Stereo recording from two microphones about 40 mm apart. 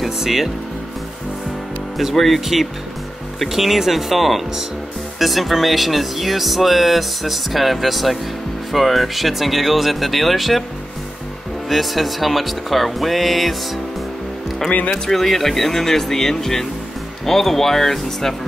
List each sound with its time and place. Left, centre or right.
0.0 s speech: centre
2.1 s speech: centre
11.7 s speech: centre
14.7 s speech: left
15.0 s speech: centre